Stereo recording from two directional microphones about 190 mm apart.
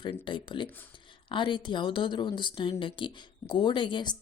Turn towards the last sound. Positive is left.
turn(degrees=25)  # may be behind; listen again after turning